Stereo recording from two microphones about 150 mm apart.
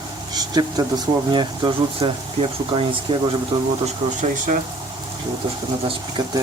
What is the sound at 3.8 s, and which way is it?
Speech, 55° right (ahead or behind).